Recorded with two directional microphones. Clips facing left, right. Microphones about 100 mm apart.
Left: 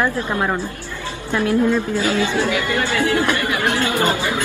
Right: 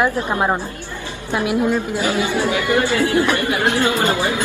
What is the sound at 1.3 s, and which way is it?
A woman's voice, 15° right (ahead or behind).